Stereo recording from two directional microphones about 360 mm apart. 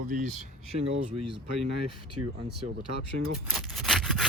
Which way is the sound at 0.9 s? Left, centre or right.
Right.